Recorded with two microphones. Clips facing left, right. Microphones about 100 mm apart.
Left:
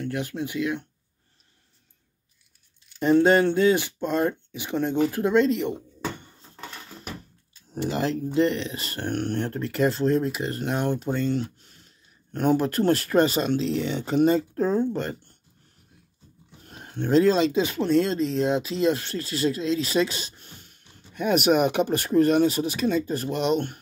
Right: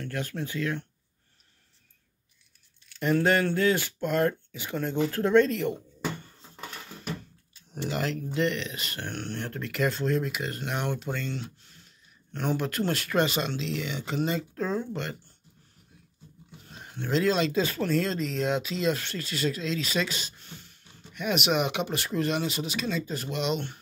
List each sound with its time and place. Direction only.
0.0 s speech: 15° left (ahead or behind)
2.9 s speech: 20° left (ahead or behind)
7.8 s speech: 25° left (ahead or behind)
12.3 s speech: 45° left (ahead or behind)
17.0 s speech: 35° left (ahead or behind)
17.5 s speech: 20° left (ahead or behind); by 23.8 s 50° left (ahead or behind)